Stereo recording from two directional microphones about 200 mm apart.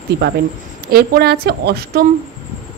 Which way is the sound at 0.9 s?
50° right (ahead or behind).